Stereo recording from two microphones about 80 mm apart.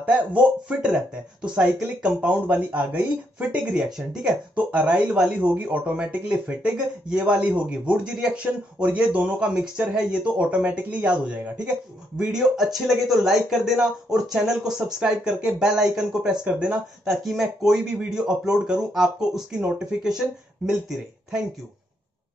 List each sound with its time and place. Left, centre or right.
0.0 s speech: centre
2.4 s speech: centre